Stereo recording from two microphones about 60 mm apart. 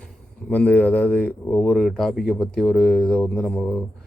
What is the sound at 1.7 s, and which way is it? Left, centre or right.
Speech, centre.